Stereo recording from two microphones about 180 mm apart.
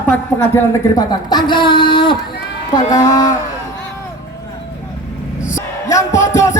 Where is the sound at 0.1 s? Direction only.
15° left (ahead or behind).